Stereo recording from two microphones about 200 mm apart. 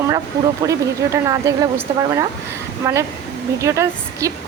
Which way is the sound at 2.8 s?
15° right (ahead or behind).